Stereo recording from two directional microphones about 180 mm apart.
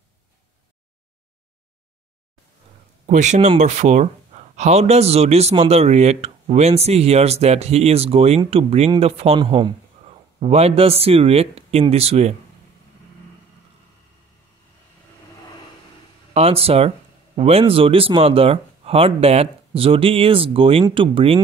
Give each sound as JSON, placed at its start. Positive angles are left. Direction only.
{"t": 3.1, "sound": "a man's voice", "side_deg": -40}
{"t": 16.3, "sound": "a man's voice", "side_deg": -35}